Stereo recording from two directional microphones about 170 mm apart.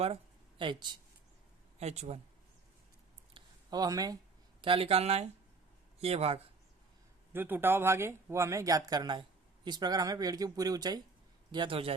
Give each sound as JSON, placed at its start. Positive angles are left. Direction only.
{"t": 0.6, "sound": "speech", "side_deg": -25}
{"t": 1.8, "sound": "speech", "side_deg": -40}
{"t": 3.3, "sound": "a sound", "side_deg": -25}
{"t": 4.6, "sound": "speech", "side_deg": -35}
{"t": 7.3, "sound": "speech", "side_deg": -10}